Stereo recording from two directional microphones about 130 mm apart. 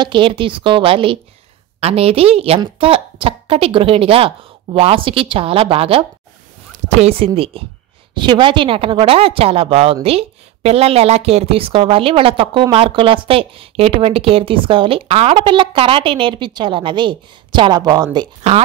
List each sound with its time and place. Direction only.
0.0 s a woman's voice: 40° right (ahead or behind)